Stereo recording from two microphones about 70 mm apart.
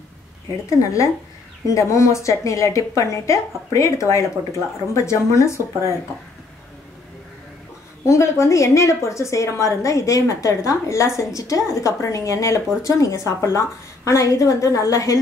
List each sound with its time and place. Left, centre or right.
0.7 s a woman's voice: left
8.0 s a woman's voice: left